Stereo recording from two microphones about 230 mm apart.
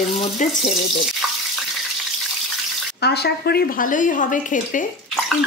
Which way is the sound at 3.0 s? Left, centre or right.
Left.